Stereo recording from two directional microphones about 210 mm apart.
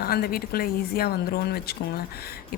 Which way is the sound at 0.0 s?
45° left (ahead or behind).